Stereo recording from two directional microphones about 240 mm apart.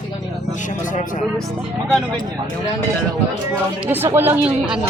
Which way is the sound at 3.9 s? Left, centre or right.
Centre.